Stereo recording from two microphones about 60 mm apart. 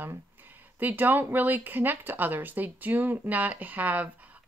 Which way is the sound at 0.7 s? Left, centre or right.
Right.